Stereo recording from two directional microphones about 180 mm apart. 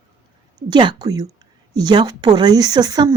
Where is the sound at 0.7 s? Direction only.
25° right (ahead or behind).